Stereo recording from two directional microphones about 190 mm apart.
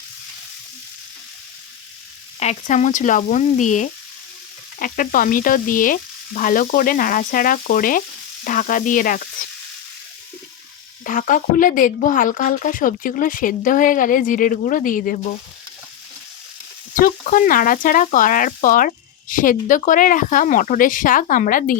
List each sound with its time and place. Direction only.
2.4 s a woman's voice: 35° left (ahead or behind)
11.0 s a woman's voice: 45° left (ahead or behind)
16.9 s a woman's voice: 45° left (ahead or behind)